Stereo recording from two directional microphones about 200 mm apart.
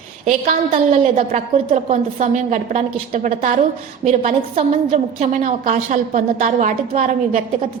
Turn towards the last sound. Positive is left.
turn(degrees=-40)  # may be behind; listen again after turning